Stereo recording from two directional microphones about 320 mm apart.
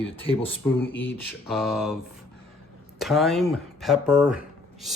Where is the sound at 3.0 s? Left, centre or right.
Centre.